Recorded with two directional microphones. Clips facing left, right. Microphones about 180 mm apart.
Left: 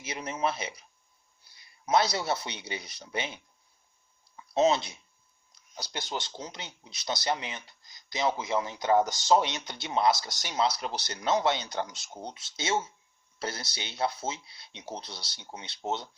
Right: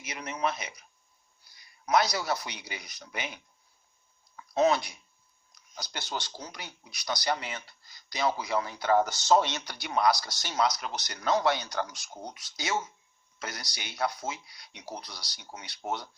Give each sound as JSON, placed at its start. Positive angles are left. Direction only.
{"t": 0.0, "sound": "speech", "side_deg": 30}
{"t": 1.9, "sound": "speech", "side_deg": 25}
{"t": 4.5, "sound": "speech", "side_deg": 25}